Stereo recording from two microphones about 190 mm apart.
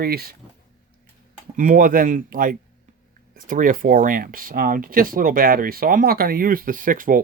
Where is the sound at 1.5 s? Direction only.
45° right (ahead or behind).